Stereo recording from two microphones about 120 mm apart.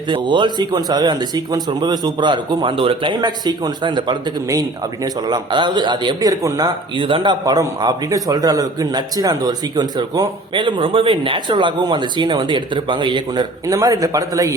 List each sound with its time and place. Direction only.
0.1 s a man's voice: 40° right (ahead or behind)
5.3 s a man's voice: 40° right (ahead or behind)
7.0 s a man's voice: 45° right (ahead or behind)
13.7 s speech: 30° right (ahead or behind)